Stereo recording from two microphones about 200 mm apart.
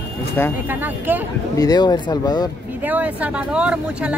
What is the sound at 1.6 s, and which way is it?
Speech, 20° left (ahead or behind).